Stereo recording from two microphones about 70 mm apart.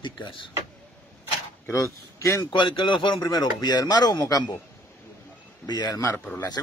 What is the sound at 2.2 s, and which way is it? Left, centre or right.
Speech, left.